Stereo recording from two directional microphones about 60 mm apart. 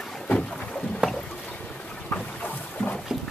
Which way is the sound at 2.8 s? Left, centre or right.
Left.